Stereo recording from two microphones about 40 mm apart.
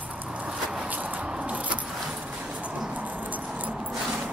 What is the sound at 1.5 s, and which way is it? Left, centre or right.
Keys jangling, right.